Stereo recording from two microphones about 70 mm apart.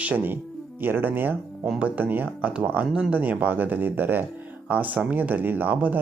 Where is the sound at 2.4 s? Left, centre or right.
Centre.